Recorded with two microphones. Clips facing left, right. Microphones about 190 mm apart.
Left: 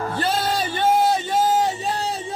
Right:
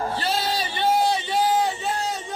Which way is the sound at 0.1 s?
50° left (ahead or behind).